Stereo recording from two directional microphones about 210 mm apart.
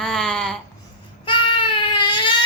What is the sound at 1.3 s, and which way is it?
Baby cry, 25° left (ahead or behind).